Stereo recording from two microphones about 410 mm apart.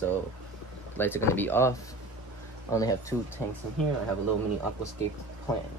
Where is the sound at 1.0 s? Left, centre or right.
Centre.